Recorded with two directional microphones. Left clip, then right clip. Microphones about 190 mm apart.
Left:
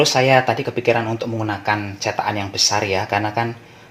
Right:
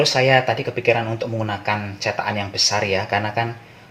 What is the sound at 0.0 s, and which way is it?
Speech, 25° left (ahead or behind).